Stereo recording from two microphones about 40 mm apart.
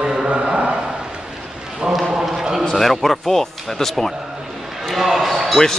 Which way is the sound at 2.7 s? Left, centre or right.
Centre.